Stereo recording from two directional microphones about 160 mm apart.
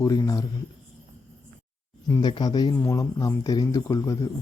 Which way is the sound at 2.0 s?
25° left (ahead or behind).